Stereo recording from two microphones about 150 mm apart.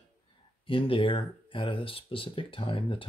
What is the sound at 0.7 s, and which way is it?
Speech, 35° left (ahead or behind).